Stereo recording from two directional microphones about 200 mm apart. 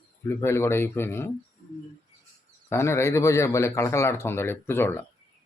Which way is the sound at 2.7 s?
10° left (ahead or behind).